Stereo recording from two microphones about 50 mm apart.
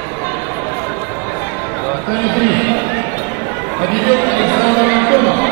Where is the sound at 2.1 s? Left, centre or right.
Left.